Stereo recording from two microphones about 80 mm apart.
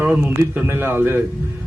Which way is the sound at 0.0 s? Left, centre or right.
Centre.